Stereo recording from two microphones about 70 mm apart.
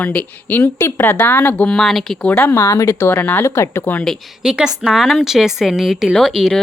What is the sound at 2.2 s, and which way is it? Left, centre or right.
Speech, left.